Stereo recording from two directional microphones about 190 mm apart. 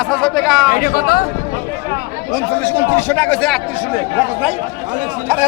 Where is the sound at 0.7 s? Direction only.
50° left (ahead or behind).